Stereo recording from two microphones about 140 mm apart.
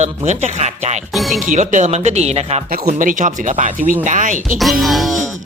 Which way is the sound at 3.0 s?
65° right (ahead or behind).